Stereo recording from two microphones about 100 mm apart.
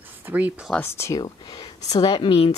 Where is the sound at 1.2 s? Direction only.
45° left (ahead or behind).